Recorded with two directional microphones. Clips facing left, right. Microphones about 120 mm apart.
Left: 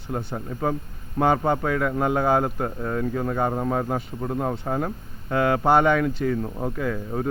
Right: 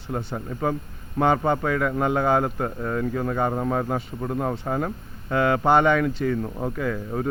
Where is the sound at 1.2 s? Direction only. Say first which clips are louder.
Even; 15° left (ahead or behind).